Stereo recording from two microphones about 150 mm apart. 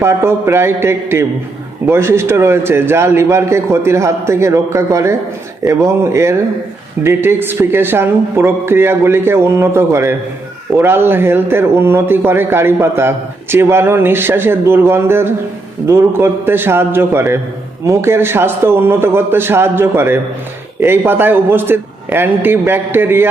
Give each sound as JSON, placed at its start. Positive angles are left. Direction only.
{"t": 0.0, "sound": "speech", "side_deg": -15}